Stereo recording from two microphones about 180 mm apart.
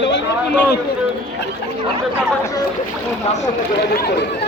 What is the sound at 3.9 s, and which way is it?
Speech, 60° left (ahead or behind).